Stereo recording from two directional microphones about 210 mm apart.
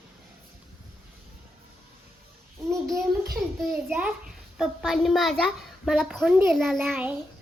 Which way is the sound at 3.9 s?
5° right (ahead or behind).